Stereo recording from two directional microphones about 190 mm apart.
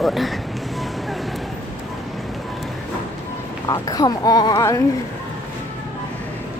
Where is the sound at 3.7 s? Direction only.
20° left (ahead or behind).